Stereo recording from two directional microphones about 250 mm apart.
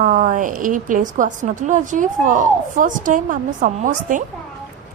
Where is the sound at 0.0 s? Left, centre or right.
Right.